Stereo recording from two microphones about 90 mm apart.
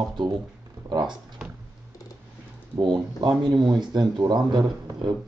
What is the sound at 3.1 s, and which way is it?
Speech, 50° right (ahead or behind).